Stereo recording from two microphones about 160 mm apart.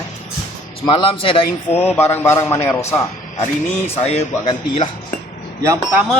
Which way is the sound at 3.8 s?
40° left (ahead or behind).